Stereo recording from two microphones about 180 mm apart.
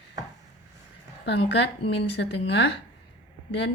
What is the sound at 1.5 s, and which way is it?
A woman's voice, 70° left (ahead or behind).